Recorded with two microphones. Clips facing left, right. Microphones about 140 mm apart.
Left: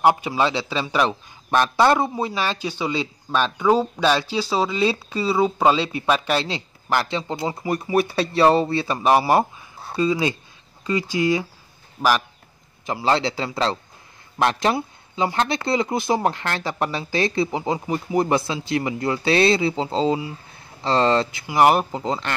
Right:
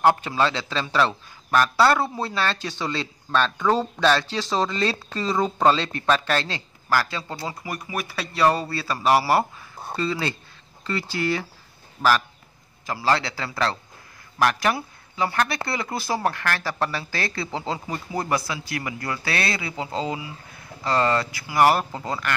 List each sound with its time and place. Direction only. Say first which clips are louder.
0.0 s a man's voice: left 1 dB; 15° left (ahead or behind)
12.0 s speech: left 1 dB; 25° left (ahead or behind)